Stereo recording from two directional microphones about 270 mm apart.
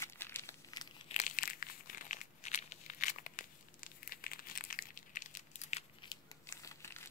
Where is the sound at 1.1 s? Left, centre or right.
Left.